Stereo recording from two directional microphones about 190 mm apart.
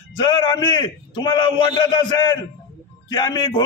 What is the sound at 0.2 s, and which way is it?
A man's voice, 25° left (ahead or behind).